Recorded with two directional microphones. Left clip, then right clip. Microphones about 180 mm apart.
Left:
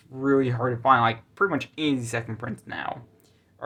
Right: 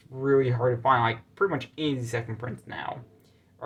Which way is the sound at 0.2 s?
25° left (ahead or behind).